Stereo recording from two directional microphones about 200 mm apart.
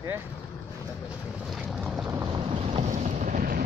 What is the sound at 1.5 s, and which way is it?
Boat, centre (ahead or behind).